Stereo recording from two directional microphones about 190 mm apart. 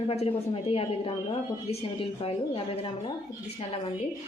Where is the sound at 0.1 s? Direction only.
30° left (ahead or behind).